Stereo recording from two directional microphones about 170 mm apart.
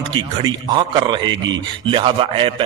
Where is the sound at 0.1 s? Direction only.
25° right (ahead or behind).